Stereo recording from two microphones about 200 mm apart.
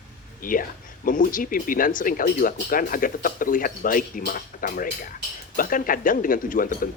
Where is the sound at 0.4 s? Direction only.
45° left (ahead or behind).